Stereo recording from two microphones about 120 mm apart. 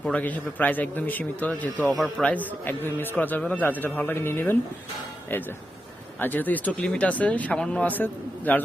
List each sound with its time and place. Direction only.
0.0 s speech: 10° left (ahead or behind)
1.9 s speech: centre (ahead or behind)
2.2 s speech: 15° left (ahead or behind)
6.1 s speech: 15° left (ahead or behind)